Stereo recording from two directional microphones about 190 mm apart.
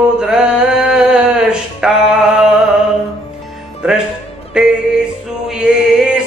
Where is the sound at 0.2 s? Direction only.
5° right (ahead or behind).